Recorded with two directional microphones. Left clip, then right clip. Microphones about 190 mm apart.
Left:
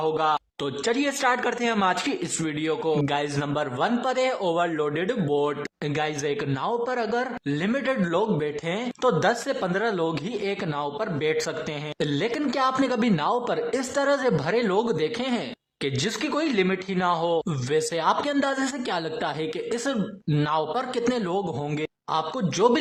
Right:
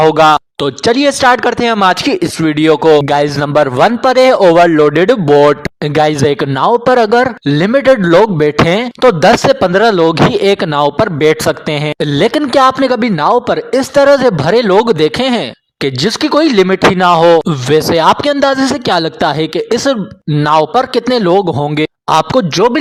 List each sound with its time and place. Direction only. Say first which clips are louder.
0.0 s a man's voice: right 17 dB; 45° right (ahead or behind)